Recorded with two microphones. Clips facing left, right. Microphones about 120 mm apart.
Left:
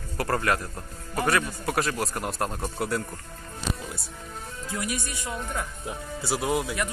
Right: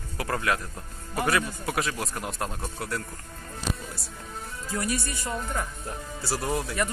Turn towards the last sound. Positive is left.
turn(degrees=5)  # may be behind; listen again after turning